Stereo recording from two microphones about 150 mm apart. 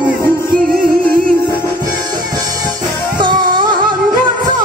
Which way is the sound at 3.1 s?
30° right (ahead or behind).